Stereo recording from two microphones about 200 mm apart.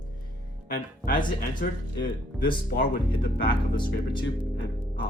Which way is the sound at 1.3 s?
45° left (ahead or behind).